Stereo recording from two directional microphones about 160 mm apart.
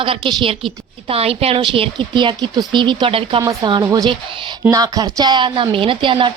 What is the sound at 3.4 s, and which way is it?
A woman's voice, 20° right (ahead or behind).